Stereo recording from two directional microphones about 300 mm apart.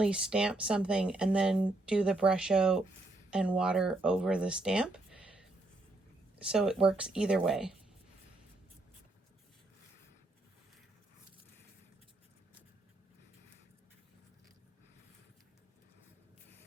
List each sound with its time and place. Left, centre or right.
0.0 s speech: centre
6.4 s speech: centre